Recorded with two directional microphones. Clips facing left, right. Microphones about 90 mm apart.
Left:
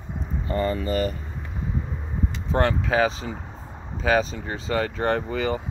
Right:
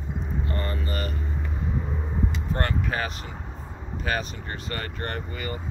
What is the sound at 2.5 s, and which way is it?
Speech, 90° left.